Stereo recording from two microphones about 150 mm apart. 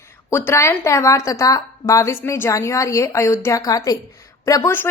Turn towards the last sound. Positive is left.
turn(degrees=20)  # may be behind; listen again after turning